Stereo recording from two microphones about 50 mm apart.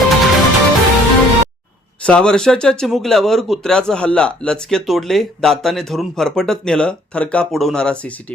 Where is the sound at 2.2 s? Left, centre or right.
Centre.